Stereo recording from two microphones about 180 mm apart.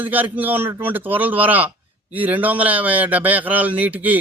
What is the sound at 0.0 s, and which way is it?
Speech, 10° right (ahead or behind).